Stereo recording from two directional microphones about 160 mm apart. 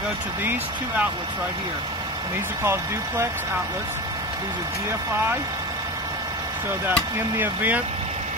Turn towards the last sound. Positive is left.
turn(degrees=-10)  # may be behind; listen again after turning